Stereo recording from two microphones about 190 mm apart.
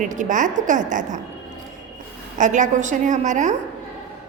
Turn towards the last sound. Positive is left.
turn(degrees=-40)  # may be behind; listen again after turning